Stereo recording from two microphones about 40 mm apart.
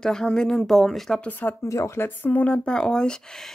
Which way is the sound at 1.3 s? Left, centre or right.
Left.